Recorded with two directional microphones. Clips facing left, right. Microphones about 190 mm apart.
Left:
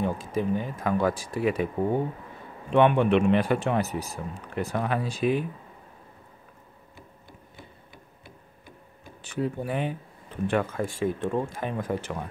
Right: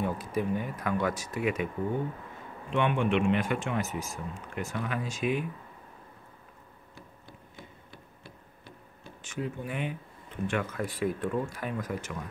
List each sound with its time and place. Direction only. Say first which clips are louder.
0.0 s speech: left 3 dB; 25° left (ahead or behind)
2.7 s speech: left 7 dB; 40° left (ahead or behind)
9.2 s speech: left 6 dB; 35° left (ahead or behind)